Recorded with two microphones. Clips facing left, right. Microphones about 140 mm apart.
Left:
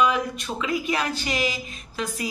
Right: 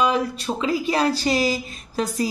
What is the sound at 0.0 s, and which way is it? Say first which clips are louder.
Speech: right 2 dB; 30° right (ahead or behind).